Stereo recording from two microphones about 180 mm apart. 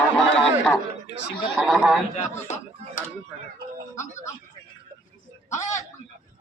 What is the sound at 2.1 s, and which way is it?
Speech, 40° left (ahead or behind).